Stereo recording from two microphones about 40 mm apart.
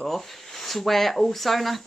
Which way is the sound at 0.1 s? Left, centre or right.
Centre.